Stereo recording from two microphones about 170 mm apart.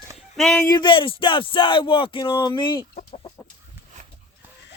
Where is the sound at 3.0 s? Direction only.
35° left (ahead or behind).